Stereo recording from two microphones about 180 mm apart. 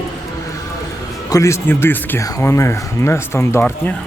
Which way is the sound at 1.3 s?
15° left (ahead or behind).